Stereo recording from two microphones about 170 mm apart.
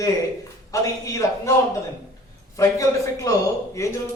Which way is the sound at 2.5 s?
20° left (ahead or behind).